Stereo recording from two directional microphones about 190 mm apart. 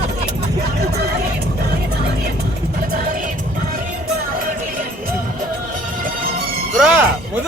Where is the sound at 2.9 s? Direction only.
45° right (ahead or behind).